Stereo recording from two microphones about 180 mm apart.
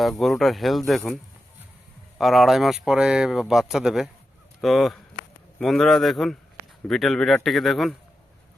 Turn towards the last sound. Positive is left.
turn(degrees=0)  # may be behind; listen again after turning